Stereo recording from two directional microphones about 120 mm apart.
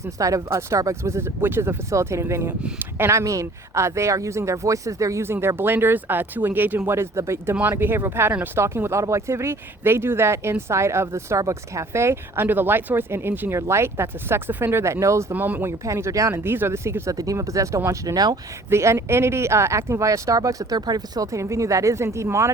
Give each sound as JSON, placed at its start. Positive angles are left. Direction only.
{"t": 0.2, "sound": "speech", "side_deg": -25}